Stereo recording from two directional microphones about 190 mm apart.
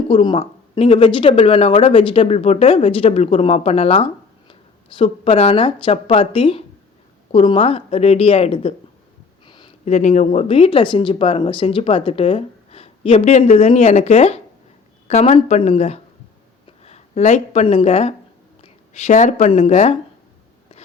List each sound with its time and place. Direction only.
0.1 s speech: 25° left (ahead or behind)
9.8 s a woman's voice: 40° left (ahead or behind)